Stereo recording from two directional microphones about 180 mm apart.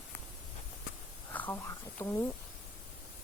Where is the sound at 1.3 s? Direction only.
10° left (ahead or behind).